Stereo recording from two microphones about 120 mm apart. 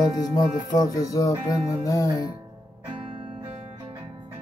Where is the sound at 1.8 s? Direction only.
30° left (ahead or behind).